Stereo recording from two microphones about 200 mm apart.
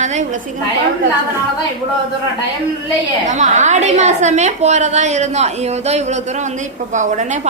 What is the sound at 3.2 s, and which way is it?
A woman's voice, 35° right (ahead or behind).